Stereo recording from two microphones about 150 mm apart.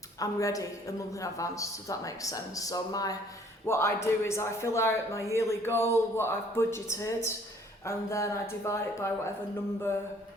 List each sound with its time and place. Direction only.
0.2 s a woman's voice: 20° left (ahead or behind)